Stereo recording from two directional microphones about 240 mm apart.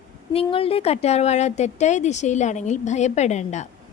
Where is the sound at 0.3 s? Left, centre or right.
Left.